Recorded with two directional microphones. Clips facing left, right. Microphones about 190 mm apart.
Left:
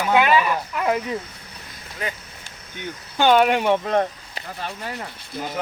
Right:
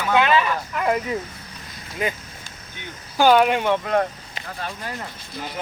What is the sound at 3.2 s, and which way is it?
Speech, centre (ahead or behind).